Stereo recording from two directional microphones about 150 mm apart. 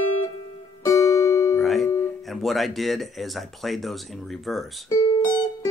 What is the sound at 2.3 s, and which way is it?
Speech, centre (ahead or behind).